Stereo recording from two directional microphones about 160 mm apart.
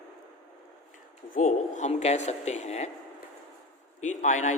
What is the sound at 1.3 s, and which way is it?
Speech, 55° left (ahead or behind).